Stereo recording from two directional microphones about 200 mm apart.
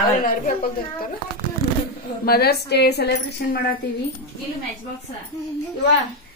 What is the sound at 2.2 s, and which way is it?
Speech, 50° left (ahead or behind).